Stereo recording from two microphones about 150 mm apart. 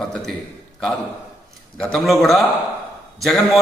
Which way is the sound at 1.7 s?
5° left (ahead or behind).